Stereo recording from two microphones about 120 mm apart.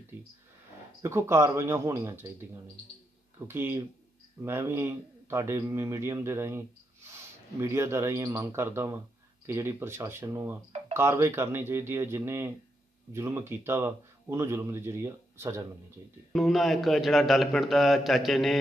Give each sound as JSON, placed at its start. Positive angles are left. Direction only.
{"t": 1.0, "sound": "a man's voice", "side_deg": -20}
{"t": 16.3, "sound": "a man's voice", "side_deg": 0}